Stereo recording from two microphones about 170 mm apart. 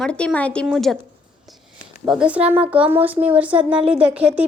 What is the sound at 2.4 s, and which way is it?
Speech, 35° right (ahead or behind).